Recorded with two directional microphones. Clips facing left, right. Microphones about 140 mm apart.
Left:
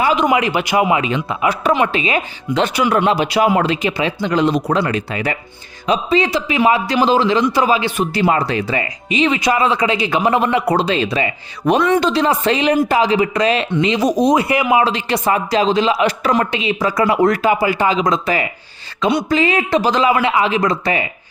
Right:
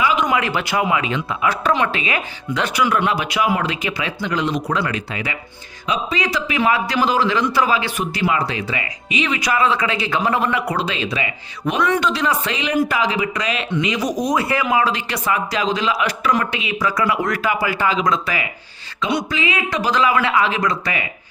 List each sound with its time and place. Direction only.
0.0 s a sound: 40° left (ahead or behind)
0.3 s speech: 20° left (ahead or behind); by 5.4 s 40° left (ahead or behind)
5.9 s speech: 25° left (ahead or behind)
8.3 s speech: 40° left (ahead or behind); by 10.6 s 20° left (ahead or behind)
10.7 s speech: 35° left (ahead or behind)
19.8 s speech: 25° left (ahead or behind)